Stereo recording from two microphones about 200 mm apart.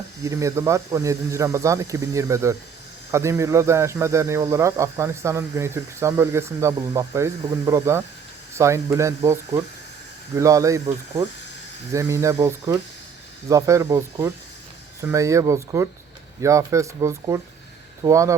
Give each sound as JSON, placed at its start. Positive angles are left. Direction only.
{"t": 0.3, "sound": "speech", "side_deg": -15}